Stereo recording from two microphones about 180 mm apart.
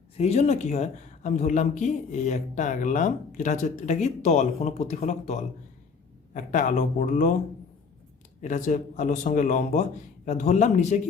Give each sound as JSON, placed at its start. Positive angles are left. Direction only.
{"t": 0.2, "sound": "a man's voice", "side_deg": 35}
{"t": 8.4, "sound": "a man's voice", "side_deg": 45}